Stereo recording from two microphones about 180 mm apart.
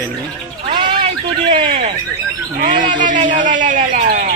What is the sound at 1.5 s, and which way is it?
Speech, 30° right (ahead or behind).